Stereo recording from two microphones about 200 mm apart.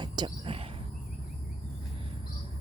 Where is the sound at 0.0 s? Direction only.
25° right (ahead or behind).